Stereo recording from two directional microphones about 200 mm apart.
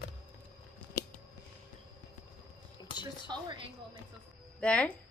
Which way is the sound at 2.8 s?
20° left (ahead or behind).